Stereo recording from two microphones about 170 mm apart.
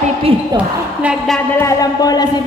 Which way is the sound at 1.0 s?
Centre (ahead or behind).